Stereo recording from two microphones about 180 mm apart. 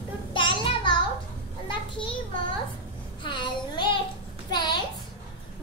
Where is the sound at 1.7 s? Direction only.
30° left (ahead or behind).